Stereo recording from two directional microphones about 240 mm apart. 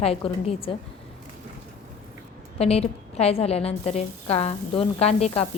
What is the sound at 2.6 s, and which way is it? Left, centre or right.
A woman's voice, left.